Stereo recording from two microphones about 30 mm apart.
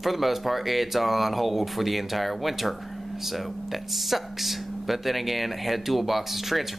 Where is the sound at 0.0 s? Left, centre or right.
Centre.